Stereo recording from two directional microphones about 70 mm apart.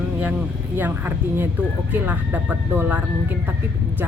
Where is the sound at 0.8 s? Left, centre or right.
Right.